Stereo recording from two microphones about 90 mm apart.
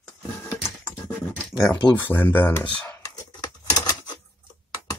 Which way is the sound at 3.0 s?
45° left (ahead or behind).